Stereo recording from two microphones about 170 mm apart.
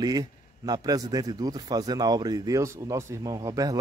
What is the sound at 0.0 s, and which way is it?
Speech, 25° right (ahead or behind).